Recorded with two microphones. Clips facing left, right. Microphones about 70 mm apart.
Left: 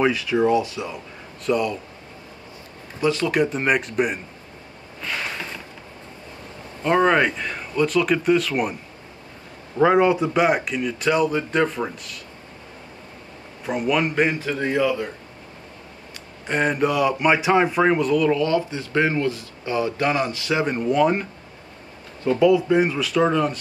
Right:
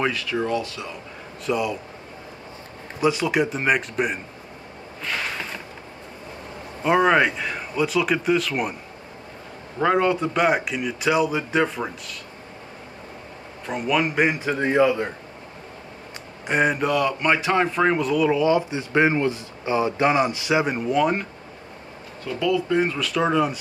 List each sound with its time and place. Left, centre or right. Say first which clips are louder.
0.0 s speech: left 5 dB; centre
1.4 s a man's voice: left 2 dB; centre
3.0 s a man's voice: left 1 dB; centre
6.8 s a man's voice: even; centre
9.8 s a man's voice: left 3 dB; centre
13.7 s a man's voice: left 1 dB; centre
14.1 s a man's voice: even; centre
16.4 s speech: right 1 dB; centre
16.7 s speech: left 2 dB; centre
22.2 s speech: left 6 dB; left
22.9 s a man's voice: left 1 dB; centre